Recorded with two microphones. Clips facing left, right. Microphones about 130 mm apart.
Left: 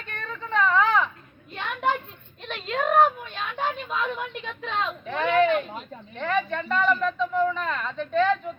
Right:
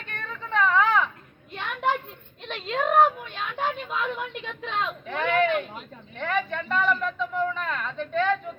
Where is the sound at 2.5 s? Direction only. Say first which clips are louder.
Even; 20° right (ahead or behind).